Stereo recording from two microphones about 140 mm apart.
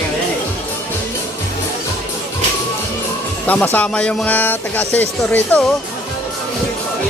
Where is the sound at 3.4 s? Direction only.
10° left (ahead or behind).